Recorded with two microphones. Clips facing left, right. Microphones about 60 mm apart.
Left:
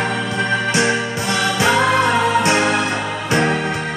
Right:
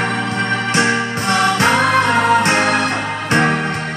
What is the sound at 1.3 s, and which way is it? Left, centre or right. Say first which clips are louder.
Music: right 3 dB; right.